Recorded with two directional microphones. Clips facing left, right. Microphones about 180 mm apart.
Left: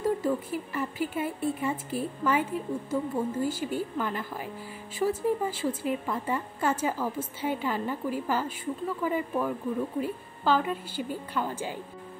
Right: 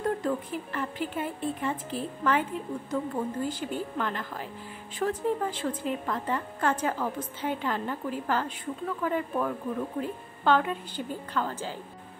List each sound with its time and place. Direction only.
0.0 s a woman's voice: 5° left (ahead or behind)